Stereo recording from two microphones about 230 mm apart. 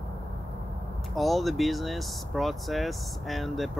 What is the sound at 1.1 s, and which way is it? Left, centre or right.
Speech, centre.